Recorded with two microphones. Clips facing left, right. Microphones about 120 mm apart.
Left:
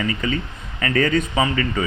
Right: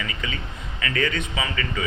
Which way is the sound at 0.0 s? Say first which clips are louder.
Left 8 dB; 40° left (ahead or behind).